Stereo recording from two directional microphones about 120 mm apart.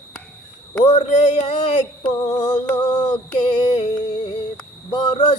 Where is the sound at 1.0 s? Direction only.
70° left (ahead or behind).